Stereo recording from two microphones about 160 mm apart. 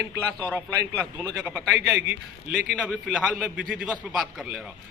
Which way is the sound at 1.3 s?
5° right (ahead or behind).